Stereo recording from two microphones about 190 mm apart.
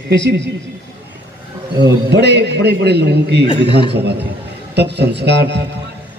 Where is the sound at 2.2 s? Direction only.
65° right (ahead or behind).